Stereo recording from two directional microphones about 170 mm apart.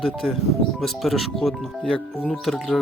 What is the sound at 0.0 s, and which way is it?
Speech, centre (ahead or behind).